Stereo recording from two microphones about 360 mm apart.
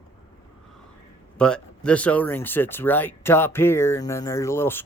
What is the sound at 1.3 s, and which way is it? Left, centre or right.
Speech, centre.